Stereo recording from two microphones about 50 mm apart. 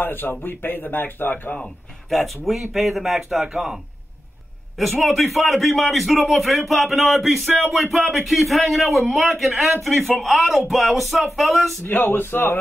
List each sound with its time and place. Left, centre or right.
0.0 s a man's voice: left
2.0 s a man's voice: centre
11.8 s a man's voice: left